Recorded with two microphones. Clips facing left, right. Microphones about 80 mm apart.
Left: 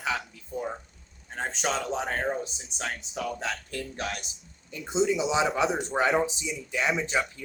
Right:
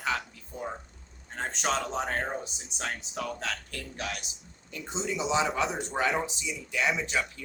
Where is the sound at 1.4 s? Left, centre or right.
Centre.